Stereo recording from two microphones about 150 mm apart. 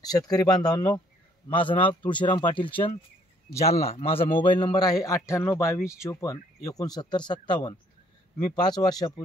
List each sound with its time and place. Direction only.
0.0 s a man's voice: 25° left (ahead or behind)
3.9 s a man's voice: 40° left (ahead or behind)